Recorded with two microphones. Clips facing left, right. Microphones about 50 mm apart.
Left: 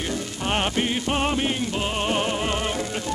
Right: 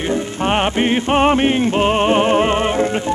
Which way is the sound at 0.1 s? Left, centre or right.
Right.